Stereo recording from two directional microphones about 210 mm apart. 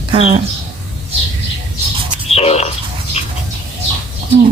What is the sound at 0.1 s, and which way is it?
Speech, 30° right (ahead or behind).